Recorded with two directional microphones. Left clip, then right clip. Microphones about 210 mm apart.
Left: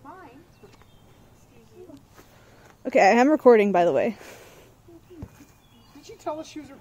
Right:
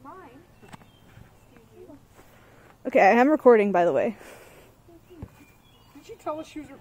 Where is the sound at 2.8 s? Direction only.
5° left (ahead or behind).